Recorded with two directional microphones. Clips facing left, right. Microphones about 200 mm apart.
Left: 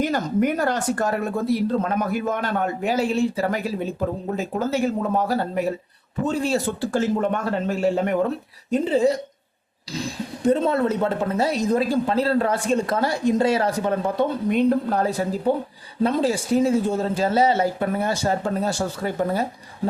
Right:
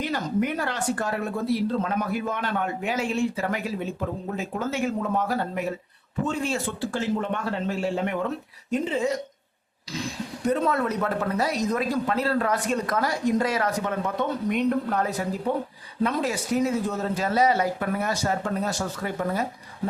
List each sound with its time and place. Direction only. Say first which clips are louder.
0.0 s speech: left 5 dB; 45° left (ahead or behind)